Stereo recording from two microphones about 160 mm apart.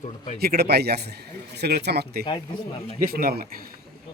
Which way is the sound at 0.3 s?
80° right.